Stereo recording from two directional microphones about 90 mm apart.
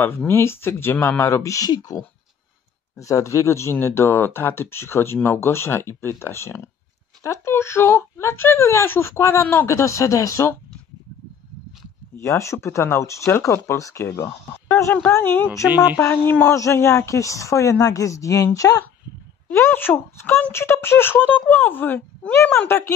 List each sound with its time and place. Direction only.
0.3 s a woman's voice: 25° left (ahead or behind)
12.2 s a woman's voice: 35° left (ahead or behind)
15.1 s a woman's voice: 20° left (ahead or behind); by 18.9 s 40° left (ahead or behind)
19.6 s speech: 25° left (ahead or behind)